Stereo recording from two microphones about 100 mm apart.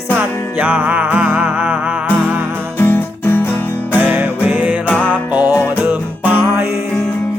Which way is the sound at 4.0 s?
15° right (ahead or behind).